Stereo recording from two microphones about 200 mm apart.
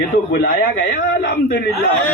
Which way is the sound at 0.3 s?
50° left (ahead or behind).